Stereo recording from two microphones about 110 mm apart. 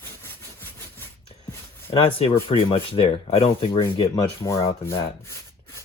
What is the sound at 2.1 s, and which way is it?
Speech, 60° left (ahead or behind).